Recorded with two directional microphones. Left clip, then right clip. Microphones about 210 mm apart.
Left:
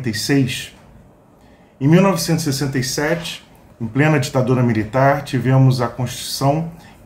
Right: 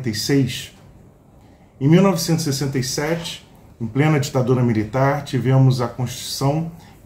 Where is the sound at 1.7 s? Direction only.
5° left (ahead or behind).